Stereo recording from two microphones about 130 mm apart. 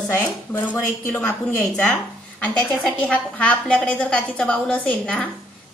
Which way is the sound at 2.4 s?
10° left (ahead or behind).